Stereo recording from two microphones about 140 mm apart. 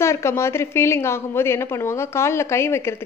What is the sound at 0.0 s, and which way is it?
A woman's voice, 20° left (ahead or behind).